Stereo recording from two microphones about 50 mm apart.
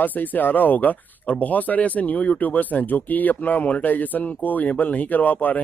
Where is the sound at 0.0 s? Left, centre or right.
Left.